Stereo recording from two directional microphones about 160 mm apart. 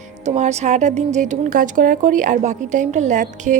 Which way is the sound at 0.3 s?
45° right (ahead or behind).